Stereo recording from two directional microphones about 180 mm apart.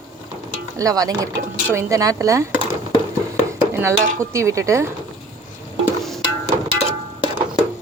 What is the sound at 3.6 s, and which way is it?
Speech, 15° right (ahead or behind).